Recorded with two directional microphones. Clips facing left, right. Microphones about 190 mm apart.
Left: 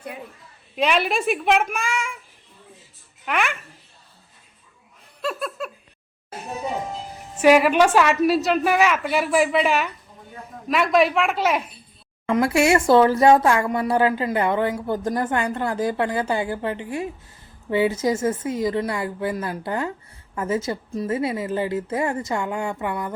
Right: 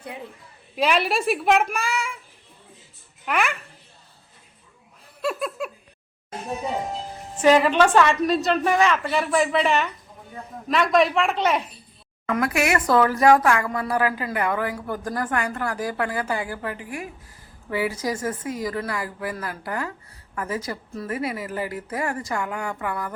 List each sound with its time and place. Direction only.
0.8 s a woman's voice: centre (ahead or behind)
3.2 s a woman's voice: centre (ahead or behind)
5.2 s laughter: 10° right (ahead or behind)
7.3 s a woman's voice: 10° left (ahead or behind)
12.2 s speech: 25° left (ahead or behind)